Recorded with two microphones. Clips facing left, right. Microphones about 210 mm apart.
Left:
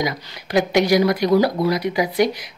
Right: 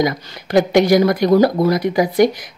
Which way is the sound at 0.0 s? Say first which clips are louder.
Right 6 dB; 50° right (ahead or behind).